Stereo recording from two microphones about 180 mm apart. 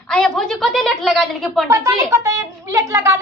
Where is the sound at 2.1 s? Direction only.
15° right (ahead or behind).